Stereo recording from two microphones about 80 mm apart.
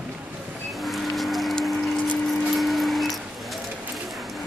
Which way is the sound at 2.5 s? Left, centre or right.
Centre.